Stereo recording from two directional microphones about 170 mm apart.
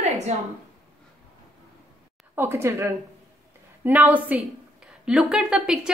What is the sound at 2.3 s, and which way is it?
A woman's voice, 15° right (ahead or behind).